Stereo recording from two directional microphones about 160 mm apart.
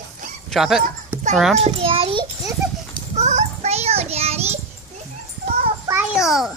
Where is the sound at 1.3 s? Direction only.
Centre (ahead or behind).